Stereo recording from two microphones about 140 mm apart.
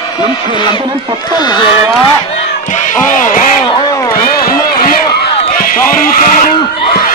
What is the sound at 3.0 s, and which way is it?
Speech, 65° left (ahead or behind).